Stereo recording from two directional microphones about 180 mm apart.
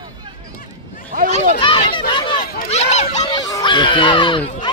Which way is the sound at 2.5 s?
40° left (ahead or behind).